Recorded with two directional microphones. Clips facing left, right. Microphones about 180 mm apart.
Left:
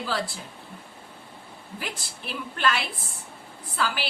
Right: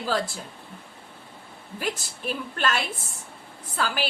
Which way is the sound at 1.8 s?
45° right (ahead or behind).